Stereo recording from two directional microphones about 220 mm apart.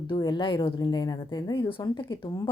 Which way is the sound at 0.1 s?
20° left (ahead or behind).